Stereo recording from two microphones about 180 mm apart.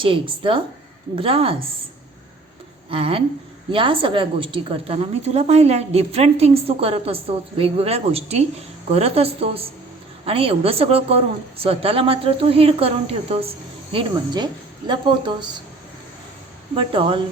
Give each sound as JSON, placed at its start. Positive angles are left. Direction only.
{"t": 0.0, "sound": "a woman's voice", "side_deg": -30}
{"t": 2.9, "sound": "a woman's voice", "side_deg": -30}
{"t": 16.7, "sound": "speech", "side_deg": -30}